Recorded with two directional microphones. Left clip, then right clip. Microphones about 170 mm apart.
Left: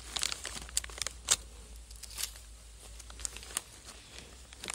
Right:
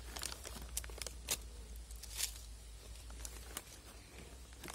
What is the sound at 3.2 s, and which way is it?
Crumpling, 15° left (ahead or behind).